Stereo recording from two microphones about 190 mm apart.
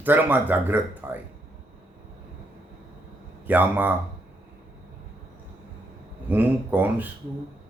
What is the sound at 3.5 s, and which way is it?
Speech, 10° right (ahead or behind).